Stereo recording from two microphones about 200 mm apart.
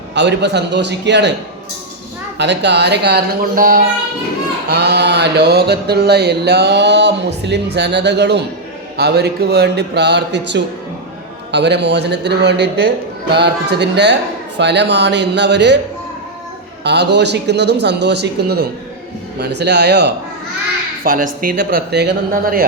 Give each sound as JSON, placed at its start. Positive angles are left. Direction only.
{"t": 0.1, "sound": "mantra", "side_deg": -60}
{"t": 2.4, "sound": "mantra", "side_deg": -60}
{"t": 4.7, "sound": "mantra", "side_deg": -55}
{"t": 16.8, "sound": "mantra", "side_deg": -55}
{"t": 21.0, "sound": "speech", "side_deg": -45}